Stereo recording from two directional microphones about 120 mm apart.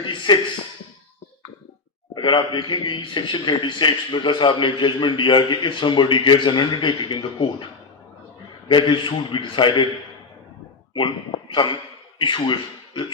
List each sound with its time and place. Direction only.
0.0 s speech: 40° left (ahead or behind)
2.1 s a man's voice: 40° left (ahead or behind)
8.7 s a man's voice: 40° left (ahead or behind)
10.9 s a man's voice: 45° left (ahead or behind)